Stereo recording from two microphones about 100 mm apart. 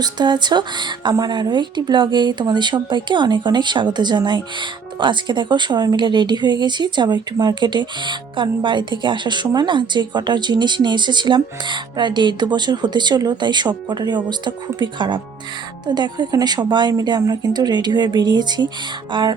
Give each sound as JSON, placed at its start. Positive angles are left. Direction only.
{"t": 0.0, "sound": "speech", "side_deg": -45}